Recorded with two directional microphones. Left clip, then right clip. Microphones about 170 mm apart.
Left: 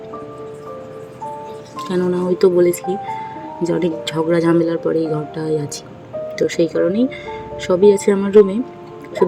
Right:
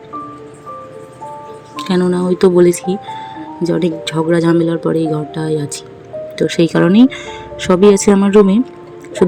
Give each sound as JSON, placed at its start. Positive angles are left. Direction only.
{"t": 1.7, "sound": "speech", "side_deg": -15}
{"t": 3.8, "sound": "speech", "side_deg": -10}